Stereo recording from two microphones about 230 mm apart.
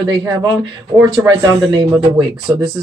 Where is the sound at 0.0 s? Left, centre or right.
Centre.